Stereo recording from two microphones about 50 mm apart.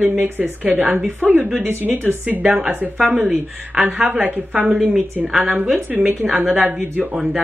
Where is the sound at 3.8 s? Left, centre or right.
Right.